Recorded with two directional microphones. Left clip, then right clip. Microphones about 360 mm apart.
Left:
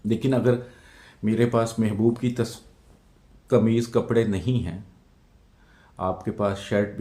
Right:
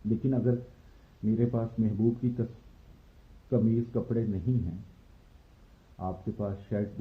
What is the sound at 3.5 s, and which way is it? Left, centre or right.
Speech, centre.